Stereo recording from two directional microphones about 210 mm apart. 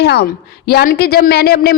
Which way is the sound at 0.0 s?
50° left (ahead or behind).